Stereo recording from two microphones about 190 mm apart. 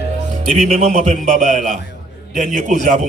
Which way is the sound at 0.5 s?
35° right (ahead or behind).